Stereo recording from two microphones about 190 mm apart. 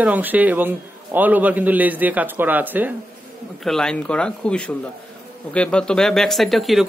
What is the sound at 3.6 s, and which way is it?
Speech, 5° left (ahead or behind).